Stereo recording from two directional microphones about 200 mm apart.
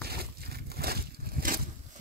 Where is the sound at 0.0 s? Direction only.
50° right (ahead or behind).